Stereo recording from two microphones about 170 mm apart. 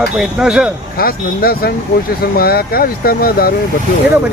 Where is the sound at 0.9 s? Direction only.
60° left (ahead or behind).